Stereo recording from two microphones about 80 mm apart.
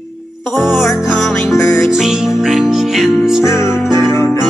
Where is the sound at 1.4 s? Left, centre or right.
Left.